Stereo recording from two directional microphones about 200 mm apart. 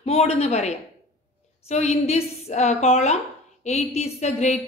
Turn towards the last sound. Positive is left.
turn(degrees=35)  # may be behind; listen again after turning